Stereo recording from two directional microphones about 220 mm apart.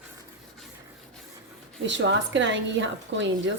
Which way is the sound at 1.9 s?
55° right (ahead or behind).